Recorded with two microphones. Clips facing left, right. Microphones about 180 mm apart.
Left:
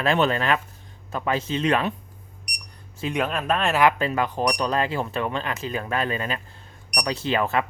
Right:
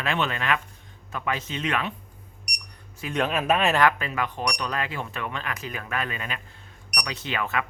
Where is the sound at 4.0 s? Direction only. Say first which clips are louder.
Left 6 dB; 35° left (ahead or behind).